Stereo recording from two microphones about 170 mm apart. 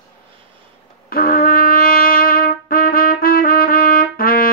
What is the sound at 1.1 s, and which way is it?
Trumpet, 60° left (ahead or behind).